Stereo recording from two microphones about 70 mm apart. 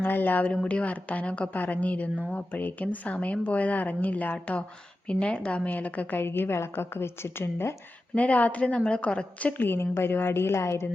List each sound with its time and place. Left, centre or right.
0.0 s a woman's voice: left
8.1 s a woman's voice: left